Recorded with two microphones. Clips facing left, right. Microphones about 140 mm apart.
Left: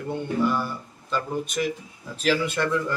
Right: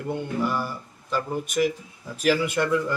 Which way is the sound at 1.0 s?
10° right (ahead or behind).